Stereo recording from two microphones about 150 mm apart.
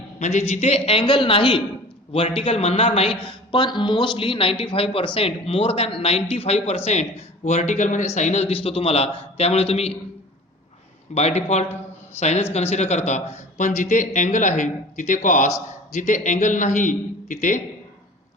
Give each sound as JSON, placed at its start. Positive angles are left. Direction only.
{"t": 0.2, "sound": "a man's voice", "side_deg": 55}
{"t": 3.2, "sound": "a man's voice", "side_deg": 30}
{"t": 11.1, "sound": "a man's voice", "side_deg": 45}